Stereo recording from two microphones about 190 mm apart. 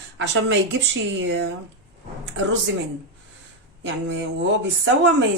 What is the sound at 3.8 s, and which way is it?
Speech, 70° right (ahead or behind).